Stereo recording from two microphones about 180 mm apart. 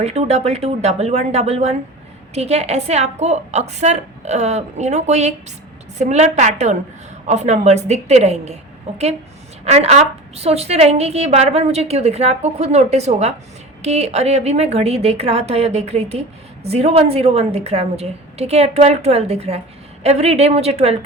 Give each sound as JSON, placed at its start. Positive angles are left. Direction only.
{"t": 0.0, "sound": "a woman's voice", "side_deg": -35}